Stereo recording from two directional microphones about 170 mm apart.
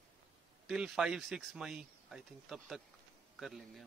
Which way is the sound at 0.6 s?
Centre (ahead or behind).